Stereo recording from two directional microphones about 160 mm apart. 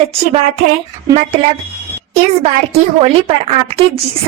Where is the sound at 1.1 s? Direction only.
40° right (ahead or behind).